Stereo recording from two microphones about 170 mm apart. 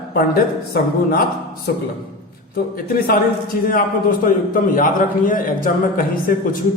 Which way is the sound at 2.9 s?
60° left (ahead or behind).